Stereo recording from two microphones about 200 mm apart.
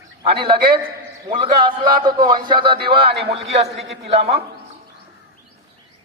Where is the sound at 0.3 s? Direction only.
25° right (ahead or behind).